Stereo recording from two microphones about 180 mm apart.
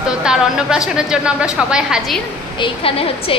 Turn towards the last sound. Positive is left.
turn(degrees=30)  # may be behind; listen again after turning